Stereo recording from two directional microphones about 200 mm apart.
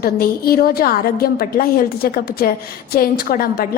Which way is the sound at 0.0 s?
50° left (ahead or behind).